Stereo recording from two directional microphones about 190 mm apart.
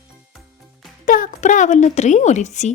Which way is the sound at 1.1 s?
45° left (ahead or behind).